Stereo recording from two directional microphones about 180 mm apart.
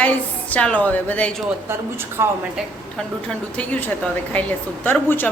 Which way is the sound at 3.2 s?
5° left (ahead or behind).